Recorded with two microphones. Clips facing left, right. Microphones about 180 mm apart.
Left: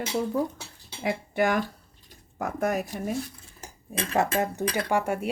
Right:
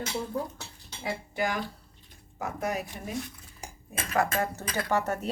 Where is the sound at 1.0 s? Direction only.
60° left (ahead or behind); by 3.7 s 40° left (ahead or behind).